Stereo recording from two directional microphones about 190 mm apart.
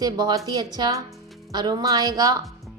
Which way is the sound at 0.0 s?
20° right (ahead or behind).